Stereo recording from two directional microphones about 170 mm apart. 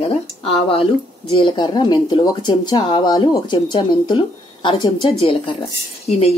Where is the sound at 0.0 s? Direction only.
35° left (ahead or behind).